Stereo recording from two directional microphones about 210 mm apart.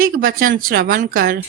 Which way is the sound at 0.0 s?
45° right (ahead or behind).